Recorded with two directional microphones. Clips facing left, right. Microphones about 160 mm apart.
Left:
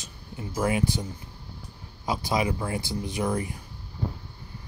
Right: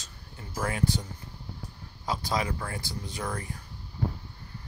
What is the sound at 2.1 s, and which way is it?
Speech, 15° left (ahead or behind).